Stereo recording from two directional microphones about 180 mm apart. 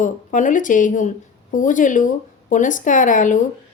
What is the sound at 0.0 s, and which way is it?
A woman's voice, 45° left (ahead or behind).